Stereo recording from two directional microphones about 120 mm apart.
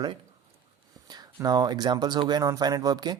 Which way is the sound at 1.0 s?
35° right (ahead or behind).